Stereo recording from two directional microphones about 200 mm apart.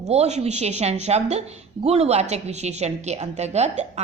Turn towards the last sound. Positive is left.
turn(degrees=-35)  # may be behind; listen again after turning